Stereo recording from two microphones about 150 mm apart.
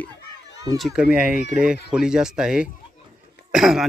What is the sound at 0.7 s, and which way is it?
Speech, 5° right (ahead or behind).